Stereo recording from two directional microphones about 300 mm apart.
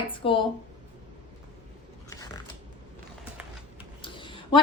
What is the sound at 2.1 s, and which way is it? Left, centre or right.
Biting, centre.